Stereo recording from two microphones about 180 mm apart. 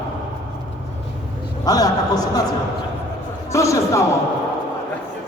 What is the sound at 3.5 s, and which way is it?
Speech, 15° left (ahead or behind).